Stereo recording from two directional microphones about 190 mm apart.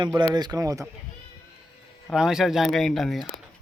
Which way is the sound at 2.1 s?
5° right (ahead or behind).